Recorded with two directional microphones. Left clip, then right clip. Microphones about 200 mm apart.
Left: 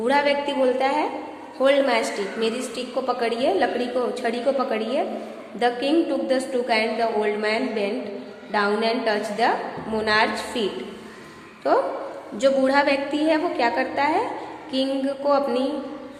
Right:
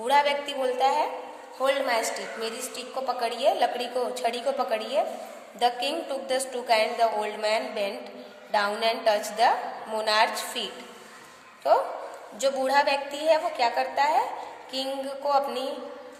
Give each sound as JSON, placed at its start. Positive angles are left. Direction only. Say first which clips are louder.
{"t": 0.0, "sound": "a woman's voice", "louder": "left 3 dB", "side_deg": -30}